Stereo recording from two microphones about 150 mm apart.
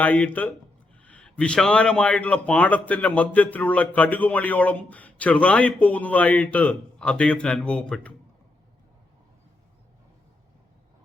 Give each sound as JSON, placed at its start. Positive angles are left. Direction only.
{"t": 0.0, "sound": "a man's voice", "side_deg": 10}